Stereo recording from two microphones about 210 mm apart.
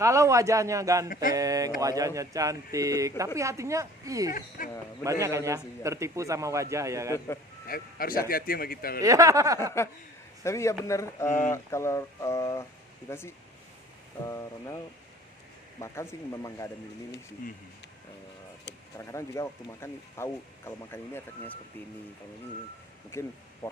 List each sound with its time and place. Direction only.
0.0 s a man's voice: 15° right (ahead or behind)
4.4 s speech: 40° left (ahead or behind)
5.0 s a man's voice: 15° right (ahead or behind)
7.7 s speech: 45° left (ahead or behind)
9.0 s a man's voice: 15° right (ahead or behind)
9.8 s speech: 10° left (ahead or behind)
15.8 s speech: 15° left (ahead or behind)
18.9 s speech: 15° left (ahead or behind)
23.1 s speech: 10° left (ahead or behind)